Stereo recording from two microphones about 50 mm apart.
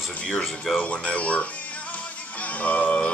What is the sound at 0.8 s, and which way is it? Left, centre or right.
Speech, left.